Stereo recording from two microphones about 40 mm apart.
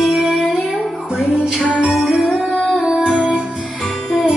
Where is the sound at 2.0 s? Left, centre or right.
Centre.